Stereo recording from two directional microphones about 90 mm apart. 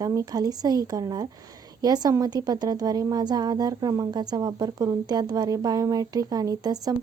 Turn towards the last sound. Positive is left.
turn(degrees=-45)  # may be behind; listen again after turning